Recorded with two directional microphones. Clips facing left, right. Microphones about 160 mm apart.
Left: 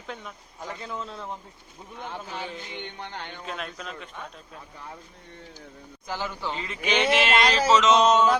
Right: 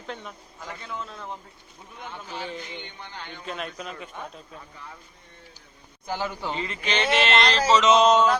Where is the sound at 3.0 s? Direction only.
60° left (ahead or behind).